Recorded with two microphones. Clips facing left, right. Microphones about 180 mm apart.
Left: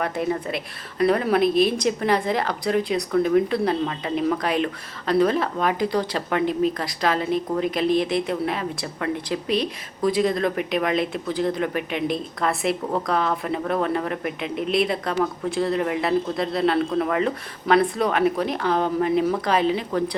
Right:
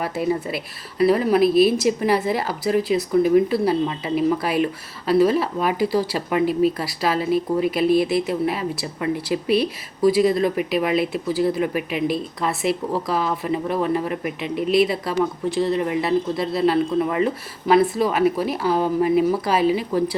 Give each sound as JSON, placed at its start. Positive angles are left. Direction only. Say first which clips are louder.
{"t": 0.4, "sound": "a woman's voice", "louder": "right 1 dB", "side_deg": -5}